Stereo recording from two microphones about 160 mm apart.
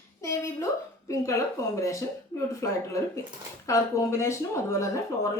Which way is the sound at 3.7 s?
20° left (ahead or behind).